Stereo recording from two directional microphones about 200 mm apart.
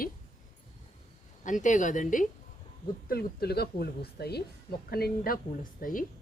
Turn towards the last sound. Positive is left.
turn(degrees=45)  # may be behind; listen again after turning